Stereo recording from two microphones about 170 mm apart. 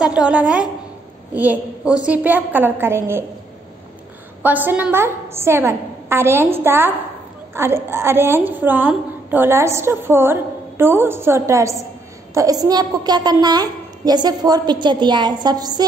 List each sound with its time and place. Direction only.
0.0 s a woman's voice: 5° right (ahead or behind)
4.4 s a woman's voice: 10° right (ahead or behind)